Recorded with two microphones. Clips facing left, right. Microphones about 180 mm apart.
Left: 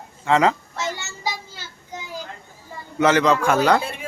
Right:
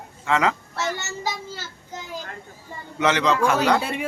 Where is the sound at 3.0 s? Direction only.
45° left (ahead or behind).